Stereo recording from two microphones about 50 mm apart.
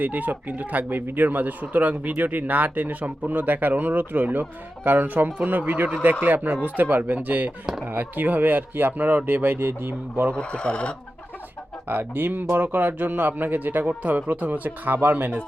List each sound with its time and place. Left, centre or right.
0.0 s speech: right
10.3 s speech: left
11.9 s speech: right